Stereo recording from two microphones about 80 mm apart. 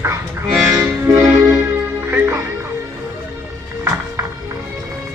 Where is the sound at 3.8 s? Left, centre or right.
Right.